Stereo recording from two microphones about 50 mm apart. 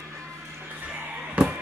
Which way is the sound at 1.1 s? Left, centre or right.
Right.